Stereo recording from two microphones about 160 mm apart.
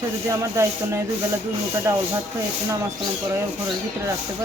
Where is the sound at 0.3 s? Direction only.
20° right (ahead or behind).